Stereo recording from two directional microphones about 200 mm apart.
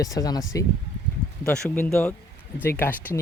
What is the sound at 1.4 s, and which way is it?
Speech, 5° left (ahead or behind).